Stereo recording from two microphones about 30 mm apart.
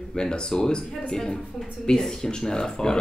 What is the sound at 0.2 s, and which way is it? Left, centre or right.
Speech, left.